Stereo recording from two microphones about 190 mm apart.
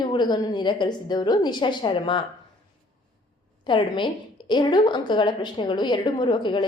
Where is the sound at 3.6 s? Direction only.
25° left (ahead or behind).